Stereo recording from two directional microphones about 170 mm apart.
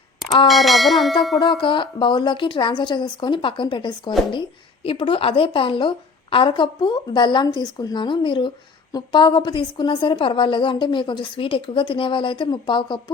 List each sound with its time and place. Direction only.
0.4 s bell: centre (ahead or behind)
1.4 s a woman's voice: 30° left (ahead or behind)